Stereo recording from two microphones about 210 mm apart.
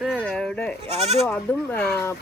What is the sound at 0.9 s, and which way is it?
Speech, 30° right (ahead or behind).